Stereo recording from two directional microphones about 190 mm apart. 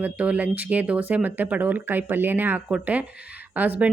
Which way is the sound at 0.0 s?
10° right (ahead or behind).